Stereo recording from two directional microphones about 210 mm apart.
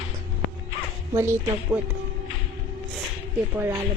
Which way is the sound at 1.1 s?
10° right (ahead or behind).